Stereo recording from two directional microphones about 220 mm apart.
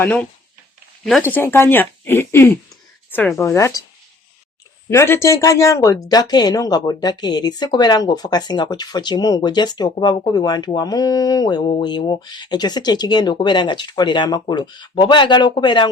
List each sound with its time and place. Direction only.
0.0 s speech: 5° left (ahead or behind)
1.3 s speech: 10° left (ahead or behind)
4.9 s speech: 10° left (ahead or behind)